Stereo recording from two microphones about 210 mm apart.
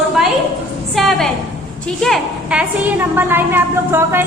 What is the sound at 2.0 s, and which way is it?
A woman's voice, centre (ahead or behind).